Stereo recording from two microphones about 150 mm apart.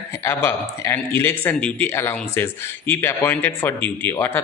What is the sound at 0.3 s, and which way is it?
A man's voice, 15° left (ahead or behind).